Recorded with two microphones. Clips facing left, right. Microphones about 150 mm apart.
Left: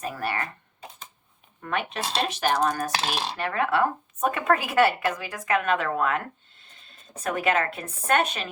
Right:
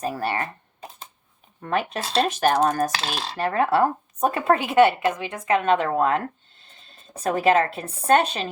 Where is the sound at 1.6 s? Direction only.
35° right (ahead or behind).